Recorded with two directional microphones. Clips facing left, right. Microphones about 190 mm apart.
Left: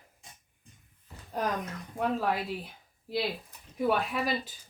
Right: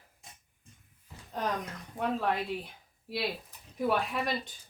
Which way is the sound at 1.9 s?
5° left (ahead or behind).